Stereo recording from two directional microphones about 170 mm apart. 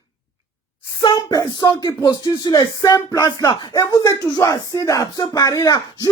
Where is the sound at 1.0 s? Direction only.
25° left (ahead or behind).